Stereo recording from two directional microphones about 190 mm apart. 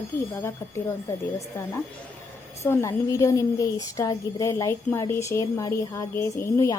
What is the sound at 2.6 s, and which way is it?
A woman's voice, 15° left (ahead or behind).